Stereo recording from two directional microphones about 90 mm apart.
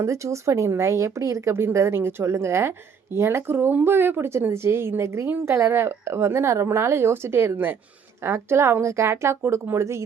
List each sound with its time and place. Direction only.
0.0 s speech: 35° right (ahead or behind)